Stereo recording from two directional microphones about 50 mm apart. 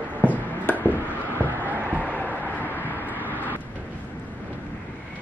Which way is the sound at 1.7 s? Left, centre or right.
Right.